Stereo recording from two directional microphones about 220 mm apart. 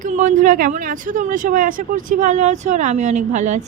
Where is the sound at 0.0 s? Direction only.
35° right (ahead or behind).